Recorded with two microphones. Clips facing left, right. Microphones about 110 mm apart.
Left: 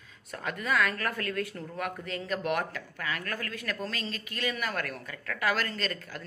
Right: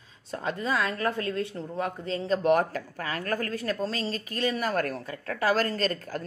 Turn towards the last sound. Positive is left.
turn(degrees=-40)  # may be behind; listen again after turning